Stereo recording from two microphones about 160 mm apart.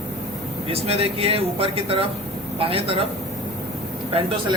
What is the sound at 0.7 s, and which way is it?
Speech, 40° right (ahead or behind).